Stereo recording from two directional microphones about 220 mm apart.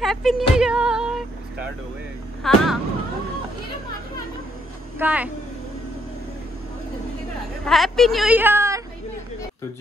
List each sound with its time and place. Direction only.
0.0 s music: centre (ahead or behind)
2.4 s speech: centre (ahead or behind)
4.9 s speech: 5° right (ahead or behind)
7.6 s a woman's voice: centre (ahead or behind)